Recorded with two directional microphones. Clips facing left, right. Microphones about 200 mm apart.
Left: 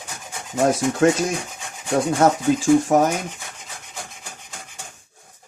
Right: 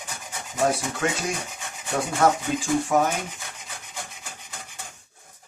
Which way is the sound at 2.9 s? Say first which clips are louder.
Left 1 dB; 45° left (ahead or behind).